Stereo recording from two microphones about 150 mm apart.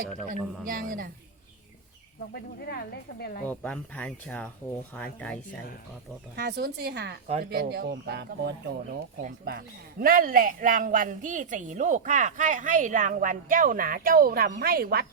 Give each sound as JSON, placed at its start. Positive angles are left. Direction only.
{"t": 0.3, "sound": "speech", "side_deg": -70}
{"t": 2.3, "sound": "speech", "side_deg": 90}
{"t": 3.4, "sound": "speech", "side_deg": 10}
{"t": 6.3, "sound": "a man's voice", "side_deg": -90}